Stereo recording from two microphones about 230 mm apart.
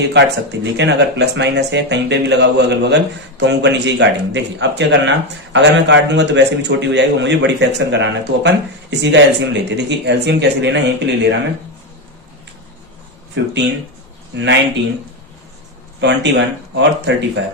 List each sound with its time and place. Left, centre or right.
0.0 s a man's voice: right
13.3 s a man's voice: right
16.0 s a man's voice: right